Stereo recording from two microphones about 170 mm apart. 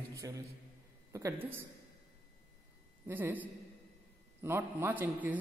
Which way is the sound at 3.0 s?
10° right (ahead or behind).